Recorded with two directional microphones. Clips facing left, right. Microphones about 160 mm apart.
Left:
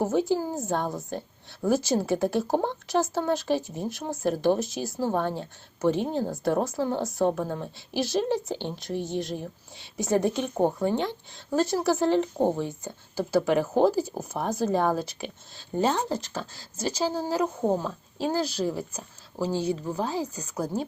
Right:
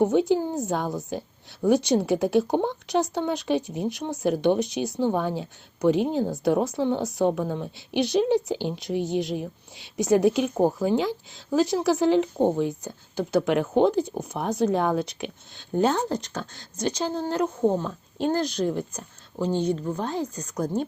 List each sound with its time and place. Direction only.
0.0 s speech: centre (ahead or behind)